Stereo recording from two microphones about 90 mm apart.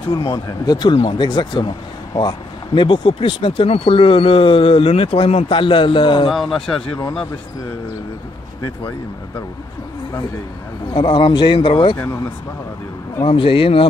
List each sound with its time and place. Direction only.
0.1 s speech: 50° left (ahead or behind); by 6.3 s 70° left (ahead or behind)
6.3 s speech: 5° left (ahead or behind)
11.0 s speech: 60° left (ahead or behind)
13.2 s speech: 75° left (ahead or behind)